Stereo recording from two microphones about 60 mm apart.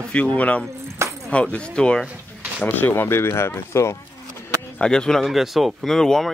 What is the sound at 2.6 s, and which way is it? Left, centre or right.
Speech, left.